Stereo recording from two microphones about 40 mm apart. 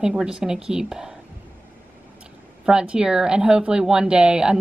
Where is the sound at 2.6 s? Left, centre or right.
Right.